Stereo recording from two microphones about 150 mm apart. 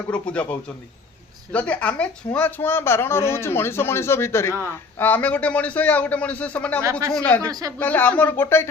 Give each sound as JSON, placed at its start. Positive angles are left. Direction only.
{"t": 0.1, "sound": "speech", "side_deg": 10}
{"t": 1.5, "sound": "speech", "side_deg": 10}